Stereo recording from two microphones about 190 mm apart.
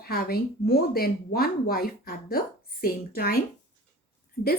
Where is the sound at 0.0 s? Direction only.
55° left (ahead or behind).